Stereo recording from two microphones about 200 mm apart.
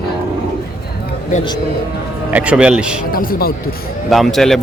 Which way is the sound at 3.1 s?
45° left (ahead or behind).